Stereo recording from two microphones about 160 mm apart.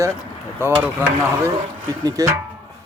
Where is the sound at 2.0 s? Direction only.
20° right (ahead or behind).